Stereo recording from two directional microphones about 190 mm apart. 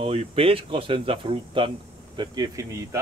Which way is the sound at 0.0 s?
30° right (ahead or behind).